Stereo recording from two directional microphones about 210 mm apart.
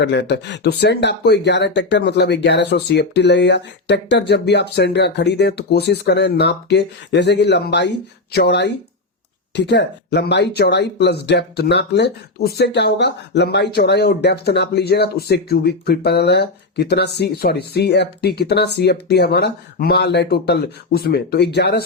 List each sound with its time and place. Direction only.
0.0 s speech: 55° left (ahead or behind)